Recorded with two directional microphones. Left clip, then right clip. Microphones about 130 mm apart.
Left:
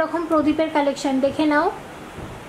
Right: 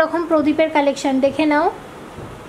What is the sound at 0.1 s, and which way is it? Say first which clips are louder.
A woman's voice: right 3 dB; 15° right (ahead or behind).